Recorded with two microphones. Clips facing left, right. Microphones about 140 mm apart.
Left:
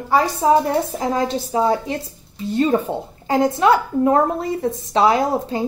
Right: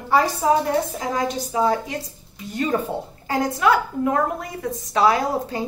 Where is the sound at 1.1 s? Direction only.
25° left (ahead or behind).